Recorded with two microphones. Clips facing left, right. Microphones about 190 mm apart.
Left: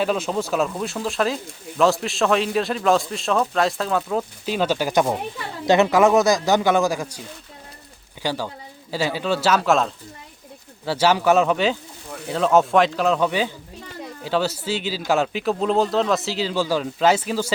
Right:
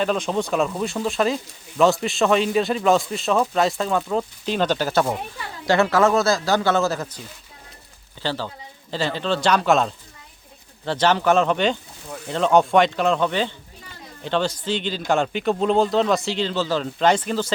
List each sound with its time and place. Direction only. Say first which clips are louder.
0.0 s a man's voice: even; 5° left (ahead or behind)
8.2 s a man's voice: left 1 dB; 10° left (ahead or behind)